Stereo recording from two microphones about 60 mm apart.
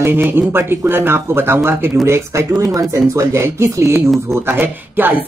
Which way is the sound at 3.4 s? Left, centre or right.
Right.